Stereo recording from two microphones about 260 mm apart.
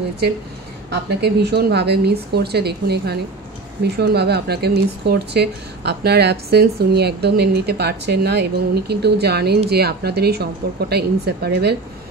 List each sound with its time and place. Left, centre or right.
0.8 s speech: right